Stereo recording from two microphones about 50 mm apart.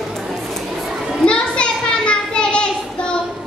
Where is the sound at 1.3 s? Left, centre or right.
Left.